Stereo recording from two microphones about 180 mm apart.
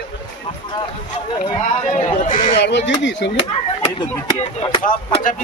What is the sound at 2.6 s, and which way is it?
Speech, 80° left.